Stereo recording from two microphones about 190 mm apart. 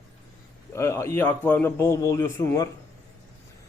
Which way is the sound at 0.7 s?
15° left (ahead or behind).